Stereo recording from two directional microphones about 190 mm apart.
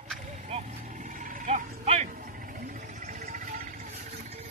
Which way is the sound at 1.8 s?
35° right (ahead or behind).